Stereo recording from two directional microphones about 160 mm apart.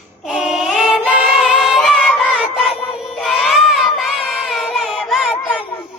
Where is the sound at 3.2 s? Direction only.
Centre (ahead or behind).